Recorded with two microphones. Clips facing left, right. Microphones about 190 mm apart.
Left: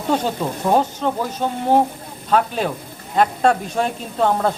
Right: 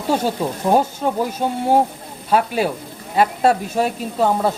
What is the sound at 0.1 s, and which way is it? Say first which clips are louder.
Speech: right 1 dB; 10° right (ahead or behind).